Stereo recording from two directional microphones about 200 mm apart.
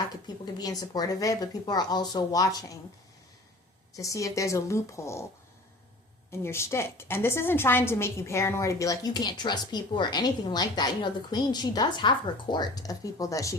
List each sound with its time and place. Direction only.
0.4 s speech: 20° left (ahead or behind)
3.9 s a woman's voice: 15° left (ahead or behind)
6.3 s a woman's voice: 15° left (ahead or behind)